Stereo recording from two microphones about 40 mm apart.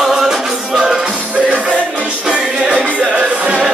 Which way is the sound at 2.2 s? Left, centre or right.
Right.